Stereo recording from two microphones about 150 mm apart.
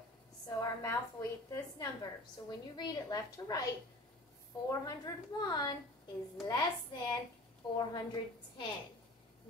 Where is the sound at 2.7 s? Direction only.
30° left (ahead or behind).